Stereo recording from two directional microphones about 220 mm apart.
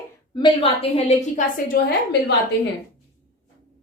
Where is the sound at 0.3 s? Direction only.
20° left (ahead or behind); by 1.8 s 40° left (ahead or behind).